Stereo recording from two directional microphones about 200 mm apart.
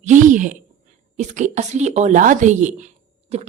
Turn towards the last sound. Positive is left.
turn(degrees=-35)  # may be behind; listen again after turning